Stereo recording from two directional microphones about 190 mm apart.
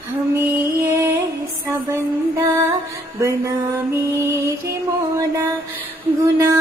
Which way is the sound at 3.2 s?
15° right (ahead or behind).